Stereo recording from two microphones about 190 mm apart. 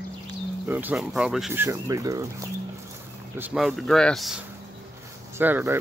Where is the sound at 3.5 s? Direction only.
Centre (ahead or behind).